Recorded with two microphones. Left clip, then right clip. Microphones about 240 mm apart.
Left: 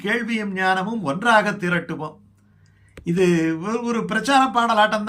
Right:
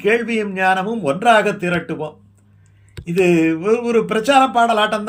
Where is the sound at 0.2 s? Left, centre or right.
Centre.